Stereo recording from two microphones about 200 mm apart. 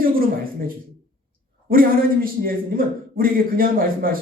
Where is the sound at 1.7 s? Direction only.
45° right (ahead or behind).